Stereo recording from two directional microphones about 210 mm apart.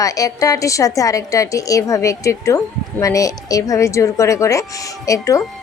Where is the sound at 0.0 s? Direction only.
15° left (ahead or behind).